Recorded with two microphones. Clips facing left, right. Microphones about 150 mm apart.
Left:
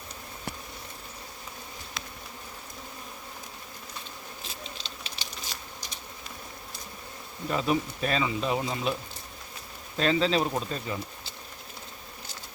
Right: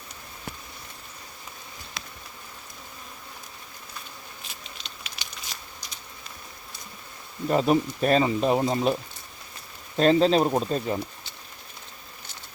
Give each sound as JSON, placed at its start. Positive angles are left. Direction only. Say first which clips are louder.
{"t": 4.6, "sound": "a sound", "louder": "left 2 dB", "side_deg": 35}
{"t": 7.4, "sound": "speech", "louder": "right 6 dB", "side_deg": -40}
{"t": 10.0, "sound": "speech", "louder": "right 6 dB", "side_deg": -40}